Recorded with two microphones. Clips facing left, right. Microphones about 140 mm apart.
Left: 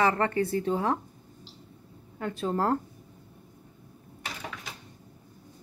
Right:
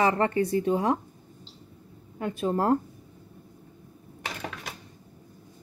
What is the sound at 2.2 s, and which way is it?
Speech, 15° right (ahead or behind).